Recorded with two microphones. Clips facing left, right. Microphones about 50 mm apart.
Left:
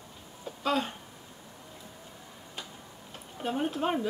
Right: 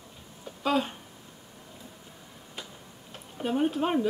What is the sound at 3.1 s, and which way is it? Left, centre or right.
Speech, centre.